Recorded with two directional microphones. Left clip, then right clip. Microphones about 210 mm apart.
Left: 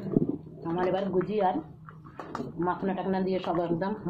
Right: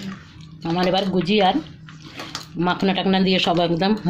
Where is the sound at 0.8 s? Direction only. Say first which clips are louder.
Right 7 dB; 55° right (ahead or behind).